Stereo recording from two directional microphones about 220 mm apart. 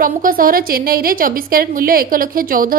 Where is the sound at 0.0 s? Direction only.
40° right (ahead or behind).